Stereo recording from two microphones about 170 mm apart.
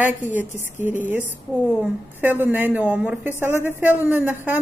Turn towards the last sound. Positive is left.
turn(degrees=-10)  # may be behind; listen again after turning